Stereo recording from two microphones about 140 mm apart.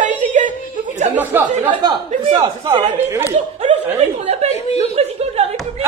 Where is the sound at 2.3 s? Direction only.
35° right (ahead or behind).